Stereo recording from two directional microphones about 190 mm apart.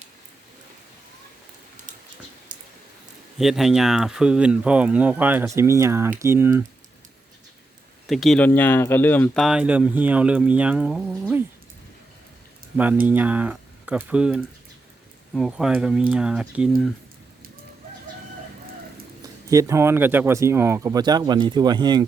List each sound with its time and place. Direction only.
3.3 s speech: centre (ahead or behind)
8.0 s speech: centre (ahead or behind)
12.7 s speech: 5° right (ahead or behind)
19.5 s speech: 15° right (ahead or behind)